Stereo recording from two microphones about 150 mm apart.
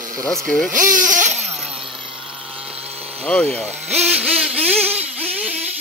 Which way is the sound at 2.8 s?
40° right (ahead or behind).